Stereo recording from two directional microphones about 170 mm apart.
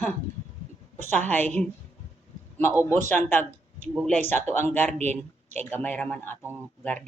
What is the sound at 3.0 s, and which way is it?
Speech, 10° left (ahead or behind).